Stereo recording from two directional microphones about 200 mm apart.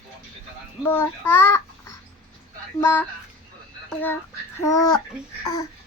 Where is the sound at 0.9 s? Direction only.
10° left (ahead or behind).